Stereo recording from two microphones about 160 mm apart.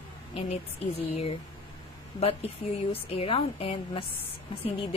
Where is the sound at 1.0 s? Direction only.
40° left (ahead or behind).